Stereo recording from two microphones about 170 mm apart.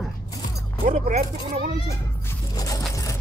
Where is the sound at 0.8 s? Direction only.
45° right (ahead or behind).